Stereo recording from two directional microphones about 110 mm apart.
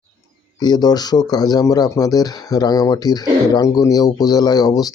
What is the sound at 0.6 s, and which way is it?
Speech, 40° left (ahead or behind).